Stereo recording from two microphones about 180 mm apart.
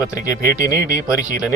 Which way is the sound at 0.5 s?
20° left (ahead or behind).